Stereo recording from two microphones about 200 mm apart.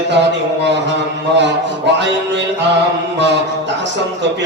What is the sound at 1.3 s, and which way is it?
A man's voice, 60° right (ahead or behind).